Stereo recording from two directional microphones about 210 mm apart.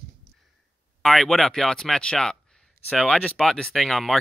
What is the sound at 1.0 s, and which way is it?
Speech, centre (ahead or behind).